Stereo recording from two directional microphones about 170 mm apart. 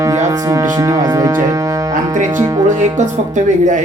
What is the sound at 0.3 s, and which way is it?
Speech, 20° right (ahead or behind).